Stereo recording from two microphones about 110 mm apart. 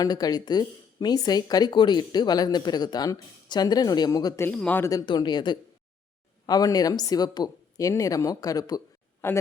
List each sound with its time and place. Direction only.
0.0 s speech: 35° left (ahead or behind)
4.4 s speech: 15° left (ahead or behind)
4.8 s speech: 30° left (ahead or behind)
5.0 s speech: 45° left (ahead or behind)
9.2 s speech: 25° left (ahead or behind)